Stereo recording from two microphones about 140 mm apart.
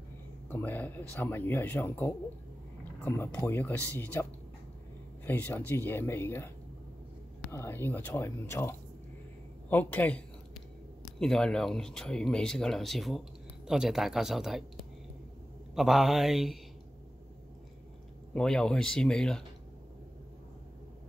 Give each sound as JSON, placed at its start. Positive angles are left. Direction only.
{"t": 0.5, "sound": "speech", "side_deg": 15}
{"t": 15.7, "sound": "speech", "side_deg": 0}
{"t": 18.3, "sound": "speech", "side_deg": 5}